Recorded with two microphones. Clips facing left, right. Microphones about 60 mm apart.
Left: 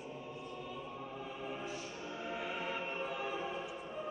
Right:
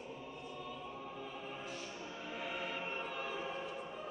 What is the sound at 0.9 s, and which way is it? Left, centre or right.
Music, centre.